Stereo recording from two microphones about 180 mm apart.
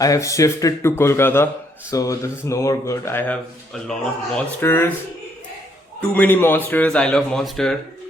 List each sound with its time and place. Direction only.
0.0 s speech: 20° left (ahead or behind)
6.0 s speech: 10° left (ahead or behind)